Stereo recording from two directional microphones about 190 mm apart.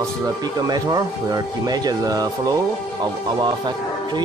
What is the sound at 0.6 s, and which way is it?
Speech, 20° right (ahead or behind).